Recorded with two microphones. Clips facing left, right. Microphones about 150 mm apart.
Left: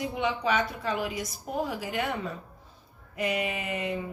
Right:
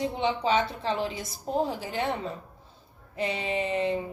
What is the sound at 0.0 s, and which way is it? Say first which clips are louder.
A woman's voice: right 2 dB; 30° right (ahead or behind).